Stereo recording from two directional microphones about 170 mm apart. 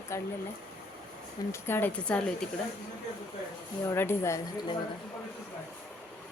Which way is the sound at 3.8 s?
15° left (ahead or behind).